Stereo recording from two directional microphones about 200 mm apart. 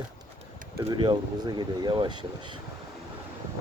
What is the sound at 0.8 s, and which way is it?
Speech, 20° right (ahead or behind).